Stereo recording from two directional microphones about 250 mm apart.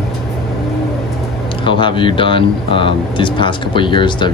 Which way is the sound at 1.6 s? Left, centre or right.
Centre.